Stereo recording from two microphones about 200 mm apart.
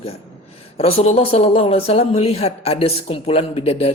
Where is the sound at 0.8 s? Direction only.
30° left (ahead or behind).